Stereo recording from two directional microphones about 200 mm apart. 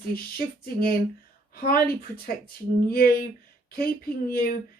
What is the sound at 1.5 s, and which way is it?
Speech, 50° left (ahead or behind).